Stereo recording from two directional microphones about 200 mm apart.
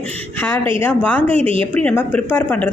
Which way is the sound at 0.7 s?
10° left (ahead or behind).